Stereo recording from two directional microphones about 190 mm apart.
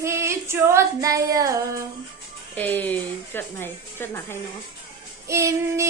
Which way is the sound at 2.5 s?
10° left (ahead or behind).